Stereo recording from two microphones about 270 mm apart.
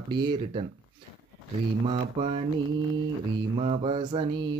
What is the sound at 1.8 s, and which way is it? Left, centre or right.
Mantra, centre.